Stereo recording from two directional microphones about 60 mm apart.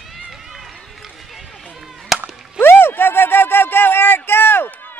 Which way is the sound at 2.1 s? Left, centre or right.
Centre.